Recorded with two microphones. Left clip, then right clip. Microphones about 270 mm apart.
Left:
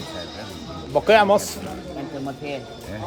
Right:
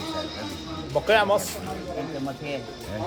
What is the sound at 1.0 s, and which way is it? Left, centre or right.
Speech, left.